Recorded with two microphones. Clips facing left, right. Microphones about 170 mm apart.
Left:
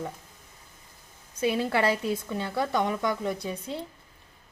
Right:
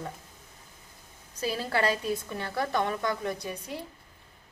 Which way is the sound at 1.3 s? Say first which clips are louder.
Left 4 dB; 20° left (ahead or behind).